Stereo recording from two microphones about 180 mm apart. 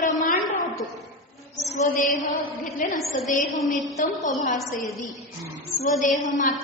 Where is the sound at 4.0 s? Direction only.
45° left (ahead or behind).